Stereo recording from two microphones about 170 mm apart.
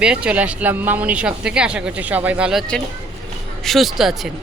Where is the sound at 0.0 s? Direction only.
5° right (ahead or behind).